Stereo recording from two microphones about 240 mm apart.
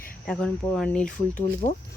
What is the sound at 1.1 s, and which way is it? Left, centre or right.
Speech, left.